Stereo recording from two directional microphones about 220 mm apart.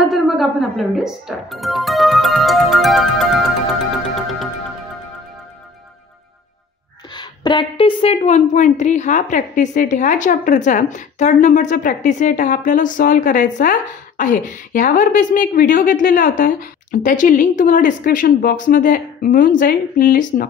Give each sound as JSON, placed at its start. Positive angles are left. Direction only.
{"t": 0.1, "sound": "music", "side_deg": 0}
{"t": 7.2, "sound": "a woman's voice", "side_deg": 20}